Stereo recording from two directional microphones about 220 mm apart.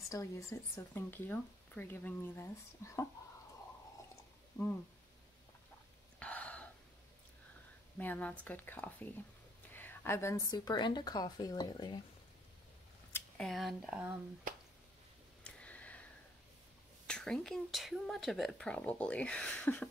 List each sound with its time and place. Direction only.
0.1 s speech: 15° left (ahead or behind)
4.6 s speech: 10° left (ahead or behind)
6.1 s gasp: 5° left (ahead or behind)
8.0 s speech: 5° left (ahead or behind)
9.7 s a sound: 10° left (ahead or behind)
10.5 s a woman's voice: 20° left (ahead or behind)
13.1 s speech: centre (ahead or behind)
15.4 s a sound: 5° left (ahead or behind)
17.1 s speech: 5° left (ahead or behind)